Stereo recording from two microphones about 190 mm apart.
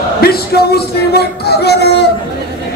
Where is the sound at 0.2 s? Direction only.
55° left (ahead or behind).